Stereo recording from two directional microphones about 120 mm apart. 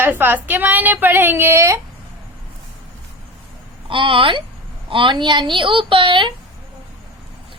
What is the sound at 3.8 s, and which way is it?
A woman's voice, 45° right (ahead or behind).